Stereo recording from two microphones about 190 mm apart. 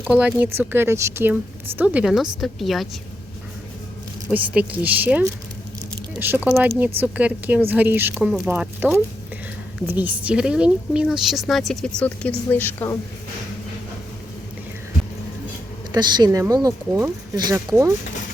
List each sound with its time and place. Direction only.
0.1 s a woman's voice: 10° right (ahead or behind)
4.3 s a woman's voice: 10° right (ahead or behind); by 13.0 s 10° left (ahead or behind)
15.9 s speech: 20° right (ahead or behind)